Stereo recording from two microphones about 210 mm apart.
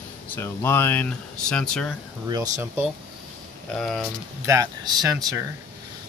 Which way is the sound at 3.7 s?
Centre (ahead or behind).